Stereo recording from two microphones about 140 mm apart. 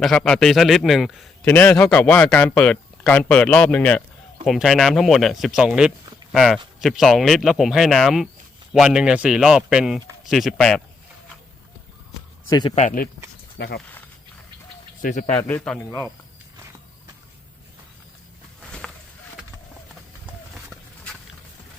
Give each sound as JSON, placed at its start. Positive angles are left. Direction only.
{"t": 0.0, "sound": "speech", "side_deg": 5}
{"t": 1.5, "sound": "speech", "side_deg": 10}
{"t": 12.5, "sound": "a man's voice", "side_deg": 30}
{"t": 12.7, "sound": "speech", "side_deg": 65}
{"t": 15.0, "sound": "speech", "side_deg": 75}
{"t": 15.4, "sound": "speech", "side_deg": 10}
{"t": 20.7, "sound": "a sound", "side_deg": 10}